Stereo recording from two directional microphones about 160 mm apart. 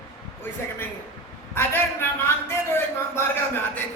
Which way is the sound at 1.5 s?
15° left (ahead or behind).